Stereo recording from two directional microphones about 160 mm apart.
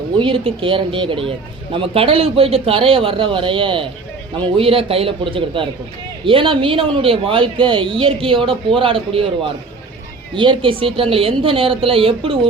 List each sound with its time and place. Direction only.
0.2 s speech: 35° right (ahead or behind)
10.3 s speech: 30° right (ahead or behind)